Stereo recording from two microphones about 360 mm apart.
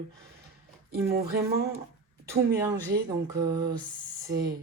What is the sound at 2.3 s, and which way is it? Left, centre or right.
Speech, centre.